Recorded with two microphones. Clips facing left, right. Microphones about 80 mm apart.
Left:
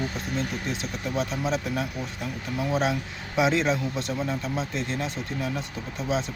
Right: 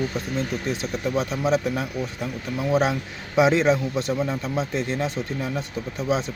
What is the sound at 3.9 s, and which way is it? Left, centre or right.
Speech, centre.